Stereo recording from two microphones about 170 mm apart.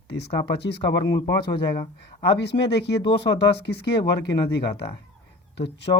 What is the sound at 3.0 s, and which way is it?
Speech, 30° left (ahead or behind).